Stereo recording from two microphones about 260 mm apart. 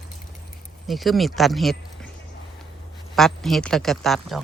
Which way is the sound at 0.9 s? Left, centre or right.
Centre.